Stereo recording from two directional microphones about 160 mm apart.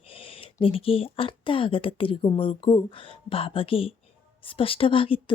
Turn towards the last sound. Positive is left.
turn(degrees=35)  # may be behind; listen again after turning